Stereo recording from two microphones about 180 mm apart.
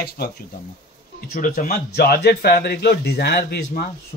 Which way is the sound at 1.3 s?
50° left (ahead or behind).